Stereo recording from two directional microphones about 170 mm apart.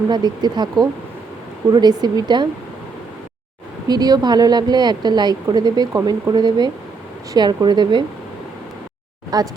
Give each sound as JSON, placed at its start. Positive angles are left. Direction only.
{"t": 0.1, "sound": "a woman's voice", "side_deg": -25}
{"t": 3.8, "sound": "a woman's voice", "side_deg": -25}
{"t": 9.3, "sound": "a woman's voice", "side_deg": -20}